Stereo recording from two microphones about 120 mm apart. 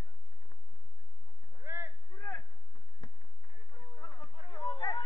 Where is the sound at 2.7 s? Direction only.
40° left (ahead or behind).